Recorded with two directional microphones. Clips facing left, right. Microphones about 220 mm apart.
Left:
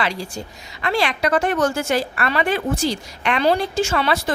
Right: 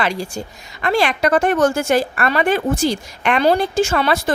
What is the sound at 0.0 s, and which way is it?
A woman's voice, 50° right (ahead or behind).